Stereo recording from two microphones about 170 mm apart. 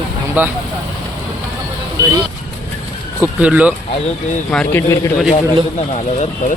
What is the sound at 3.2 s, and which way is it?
Speech, 10° right (ahead or behind).